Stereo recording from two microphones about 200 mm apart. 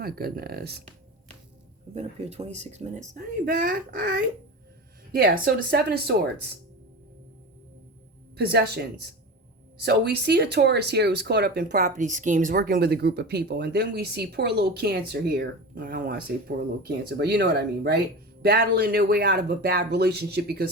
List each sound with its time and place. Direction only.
0.0 s speech: 50° right (ahead or behind)
1.9 s speech: 30° right (ahead or behind); by 6.2 s 50° right (ahead or behind)
8.4 s a man's voice: 55° right (ahead or behind)